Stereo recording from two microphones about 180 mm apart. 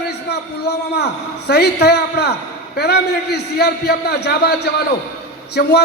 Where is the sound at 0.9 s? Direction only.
65° left (ahead or behind).